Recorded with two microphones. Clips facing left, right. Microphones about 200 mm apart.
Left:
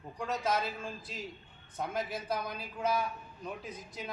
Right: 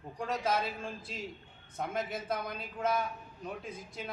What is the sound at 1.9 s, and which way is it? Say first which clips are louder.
Speech: even; 25° right (ahead or behind).